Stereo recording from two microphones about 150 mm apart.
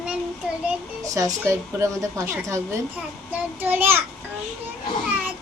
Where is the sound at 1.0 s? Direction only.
25° right (ahead or behind).